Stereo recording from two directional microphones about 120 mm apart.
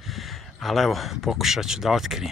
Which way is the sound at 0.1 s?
Centre (ahead or behind).